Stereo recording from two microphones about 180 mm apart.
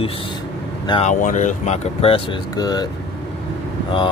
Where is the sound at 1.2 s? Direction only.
45° left (ahead or behind); by 2.8 s 20° left (ahead or behind).